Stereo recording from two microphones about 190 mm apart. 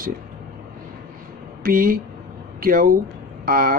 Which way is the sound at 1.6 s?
50° right (ahead or behind).